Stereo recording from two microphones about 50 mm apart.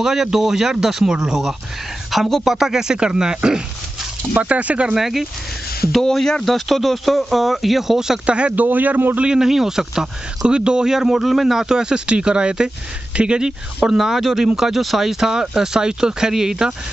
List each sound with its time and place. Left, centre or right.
0.0 s speech: centre
2.0 s speech: centre
4.3 s speech: right
4.9 s speech: centre
6.0 s speech: centre
8.3 s speech: right
8.6 s a man's voice: right
9.2 s speech: centre